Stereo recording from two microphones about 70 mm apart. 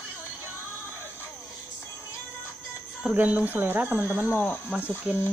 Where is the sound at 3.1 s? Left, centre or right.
Right.